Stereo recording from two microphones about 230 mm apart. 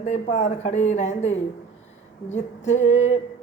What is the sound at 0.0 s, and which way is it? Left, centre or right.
Speech, left.